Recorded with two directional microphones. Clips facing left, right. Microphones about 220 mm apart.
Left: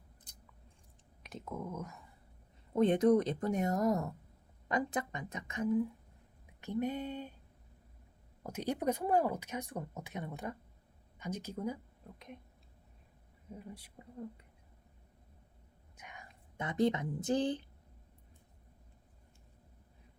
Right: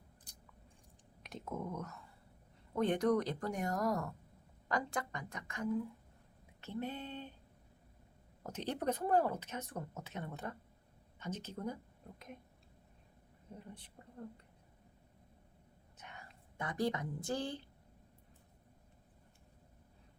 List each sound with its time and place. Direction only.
1.2 s speech: centre (ahead or behind)
2.7 s speech: 20° left (ahead or behind)
8.4 s speech: 10° left (ahead or behind)
13.5 s speech: 10° left (ahead or behind)
16.0 s a woman's voice: 15° left (ahead or behind)